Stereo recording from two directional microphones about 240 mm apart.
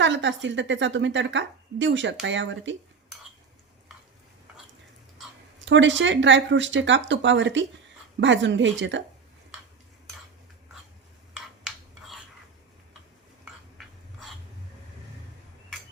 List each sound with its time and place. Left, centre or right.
0.0 s a woman's voice: right
5.6 s a woman's voice: right
11.6 s filing: centre